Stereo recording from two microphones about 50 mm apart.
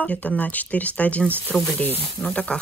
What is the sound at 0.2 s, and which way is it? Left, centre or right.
Speech, left.